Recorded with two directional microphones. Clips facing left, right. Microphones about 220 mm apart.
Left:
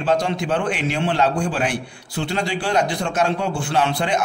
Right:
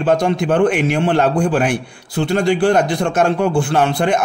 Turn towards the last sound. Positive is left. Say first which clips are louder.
# right 5 dB
turn(degrees=-50)  # may be behind; listen again after turning